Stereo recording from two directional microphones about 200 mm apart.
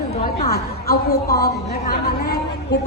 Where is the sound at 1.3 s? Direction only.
50° left (ahead or behind).